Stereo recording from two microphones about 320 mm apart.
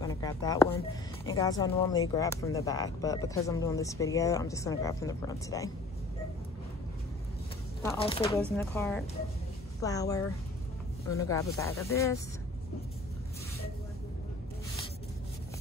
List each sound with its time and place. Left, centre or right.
0.0 s speech: centre
7.8 s speech: centre
8.4 s speech: centre